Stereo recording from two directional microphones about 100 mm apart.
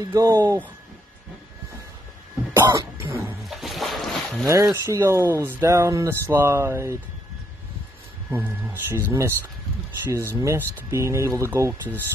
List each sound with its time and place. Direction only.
0.0 s speech: 35° right (ahead or behind)
2.6 s speech: 45° right (ahead or behind)
3.0 s dog: 25° right (ahead or behind)
3.4 s boat: centre (ahead or behind)
4.7 s speech: 30° right (ahead or behind)
8.3 s speech: 20° right (ahead or behind)